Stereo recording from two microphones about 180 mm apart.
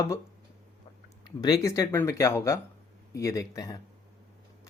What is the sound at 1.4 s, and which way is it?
Speech, 20° left (ahead or behind).